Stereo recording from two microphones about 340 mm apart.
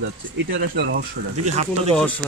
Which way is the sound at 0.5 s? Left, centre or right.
Right.